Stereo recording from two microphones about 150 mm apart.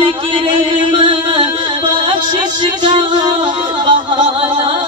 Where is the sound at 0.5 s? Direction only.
35° right (ahead or behind).